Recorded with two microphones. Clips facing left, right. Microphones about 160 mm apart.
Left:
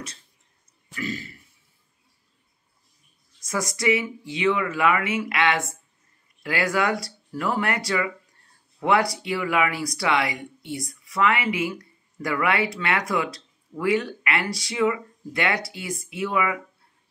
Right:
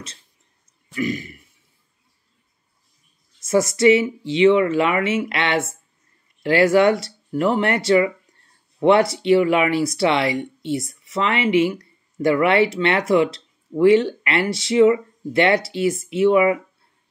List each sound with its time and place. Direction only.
0.9 s speech: 15° right (ahead or behind)
3.3 s speech: 25° right (ahead or behind)